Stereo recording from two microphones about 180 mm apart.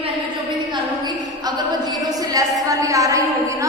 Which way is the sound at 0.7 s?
25° right (ahead or behind).